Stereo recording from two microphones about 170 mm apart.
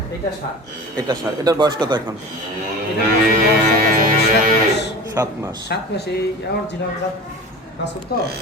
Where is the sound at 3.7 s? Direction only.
60° right (ahead or behind).